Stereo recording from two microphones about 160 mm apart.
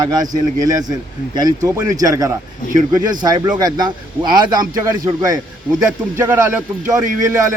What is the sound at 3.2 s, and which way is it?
A man's voice, 25° right (ahead or behind).